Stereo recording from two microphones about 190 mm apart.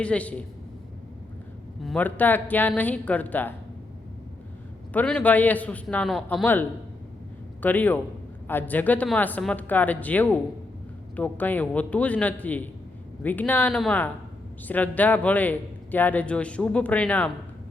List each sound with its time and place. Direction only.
0.0 s speech: 5° left (ahead or behind)
1.8 s speech: 5° left (ahead or behind)
4.9 s speech: 5° left (ahead or behind)